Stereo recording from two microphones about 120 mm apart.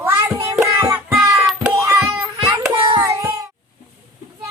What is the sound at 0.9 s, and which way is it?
Music, 20° right (ahead or behind).